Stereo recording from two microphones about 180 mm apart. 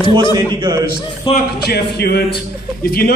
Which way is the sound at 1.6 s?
65° left (ahead or behind).